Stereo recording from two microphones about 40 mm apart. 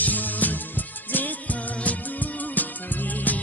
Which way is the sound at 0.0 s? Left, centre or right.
Left.